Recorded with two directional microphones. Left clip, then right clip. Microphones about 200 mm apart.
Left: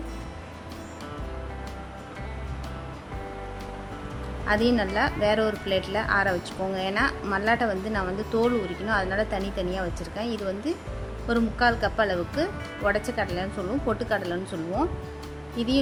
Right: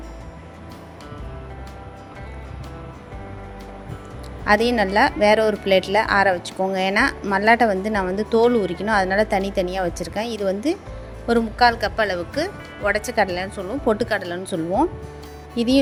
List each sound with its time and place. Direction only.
4.4 s speech: 30° right (ahead or behind)